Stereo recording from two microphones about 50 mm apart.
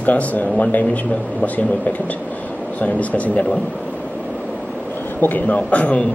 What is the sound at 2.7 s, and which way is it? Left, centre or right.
Speech, left.